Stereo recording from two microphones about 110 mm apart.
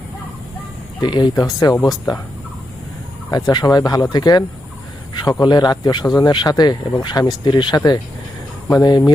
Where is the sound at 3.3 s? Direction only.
35° left (ahead or behind).